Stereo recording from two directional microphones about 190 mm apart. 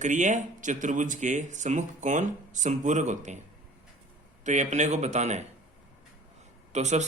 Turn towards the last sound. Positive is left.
turn(degrees=-35)  # may be behind; listen again after turning